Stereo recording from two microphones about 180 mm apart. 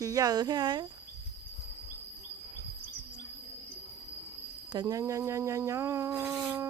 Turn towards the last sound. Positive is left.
turn(degrees=-15)  # may be behind; listen again after turning